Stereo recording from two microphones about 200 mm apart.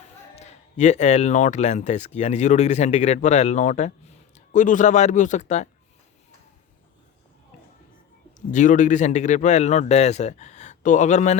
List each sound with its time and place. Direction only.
0.3 s speech: 35° left (ahead or behind)
8.4 s speech: 40° left (ahead or behind)